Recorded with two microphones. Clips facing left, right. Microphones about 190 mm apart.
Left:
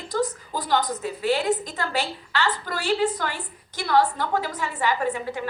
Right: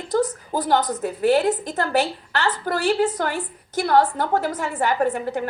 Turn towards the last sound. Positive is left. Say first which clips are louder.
# right 5 dB
turn(degrees=-50)  # may be behind; listen again after turning